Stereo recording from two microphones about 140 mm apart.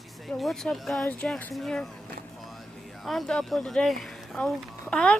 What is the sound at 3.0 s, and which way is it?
Speech, centre (ahead or behind).